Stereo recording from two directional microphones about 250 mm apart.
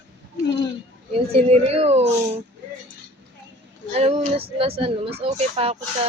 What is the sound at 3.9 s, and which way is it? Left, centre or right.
Speech, right.